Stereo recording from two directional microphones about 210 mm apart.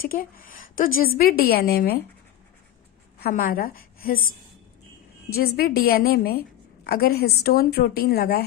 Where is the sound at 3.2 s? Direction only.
45° left (ahead or behind).